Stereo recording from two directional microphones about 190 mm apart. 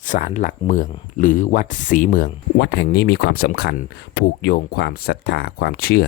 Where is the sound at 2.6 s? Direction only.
65° left (ahead or behind).